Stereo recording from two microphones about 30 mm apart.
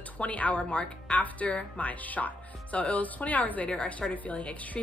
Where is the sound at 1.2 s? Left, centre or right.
Left.